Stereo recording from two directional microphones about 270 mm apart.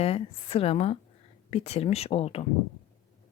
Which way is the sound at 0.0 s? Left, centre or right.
Left.